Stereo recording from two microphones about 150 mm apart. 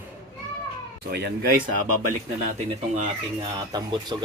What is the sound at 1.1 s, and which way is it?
Speech, 90° right.